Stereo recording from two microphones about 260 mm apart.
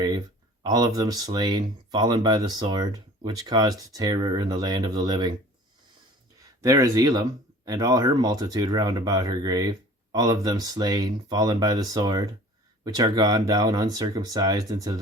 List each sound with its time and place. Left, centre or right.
0.6 s speech: centre
6.4 s speech: centre